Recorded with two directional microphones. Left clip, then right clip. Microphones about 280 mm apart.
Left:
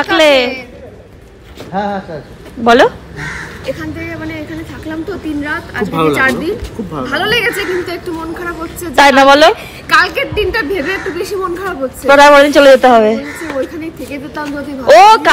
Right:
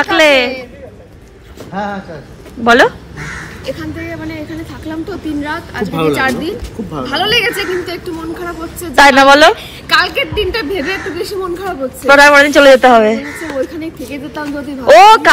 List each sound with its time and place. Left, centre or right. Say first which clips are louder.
0.0 s a sound: even; centre
1.7 s a man's voice: left 3 dB; left
2.6 s speech: even; centre